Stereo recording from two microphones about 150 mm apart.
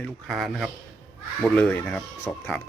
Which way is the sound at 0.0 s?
Centre (ahead or behind).